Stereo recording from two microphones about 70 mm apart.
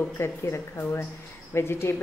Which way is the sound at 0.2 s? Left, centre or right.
Left.